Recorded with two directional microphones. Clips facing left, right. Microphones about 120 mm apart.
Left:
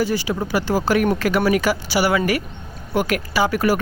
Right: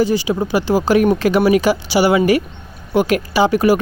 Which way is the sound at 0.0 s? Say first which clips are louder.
Right 5 dB; 20° right (ahead or behind).